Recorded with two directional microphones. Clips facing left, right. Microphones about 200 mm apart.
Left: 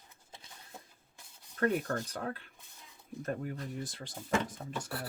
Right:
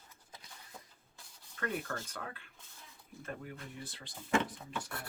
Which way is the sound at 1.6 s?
40° left (ahead or behind).